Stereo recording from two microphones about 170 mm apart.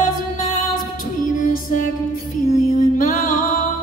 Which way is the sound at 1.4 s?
50° left (ahead or behind).